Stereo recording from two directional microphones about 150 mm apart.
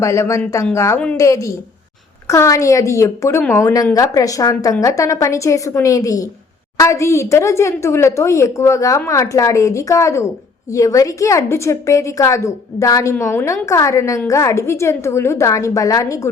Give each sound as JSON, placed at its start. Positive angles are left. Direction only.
{"t": 0.0, "sound": "a woman's voice", "side_deg": 20}